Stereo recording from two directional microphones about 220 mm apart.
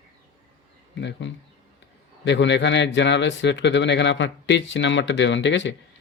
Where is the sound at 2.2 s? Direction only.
55° left (ahead or behind).